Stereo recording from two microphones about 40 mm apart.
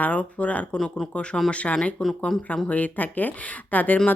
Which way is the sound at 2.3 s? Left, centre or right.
Centre.